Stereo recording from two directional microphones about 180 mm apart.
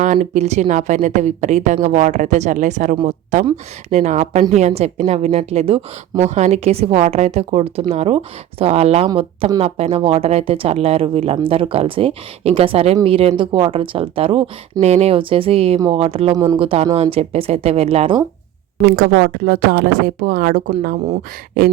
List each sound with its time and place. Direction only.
0.0 s a woman's voice: 45° right (ahead or behind)
18.9 s speech: 55° right (ahead or behind)